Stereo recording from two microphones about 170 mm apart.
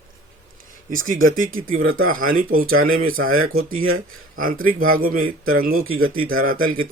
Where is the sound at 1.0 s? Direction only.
55° right (ahead or behind).